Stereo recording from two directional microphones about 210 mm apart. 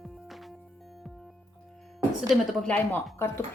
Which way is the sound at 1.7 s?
Centre (ahead or behind).